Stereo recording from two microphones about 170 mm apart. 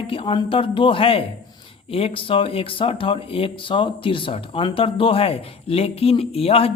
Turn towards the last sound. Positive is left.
turn(degrees=35)  # may be behind; listen again after turning